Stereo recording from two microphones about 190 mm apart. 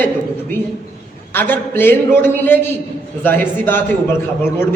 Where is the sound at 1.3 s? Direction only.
10° left (ahead or behind).